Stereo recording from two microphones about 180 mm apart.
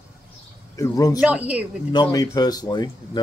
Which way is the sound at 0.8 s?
20° left (ahead or behind).